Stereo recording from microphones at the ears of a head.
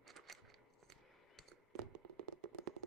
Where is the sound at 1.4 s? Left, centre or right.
Right.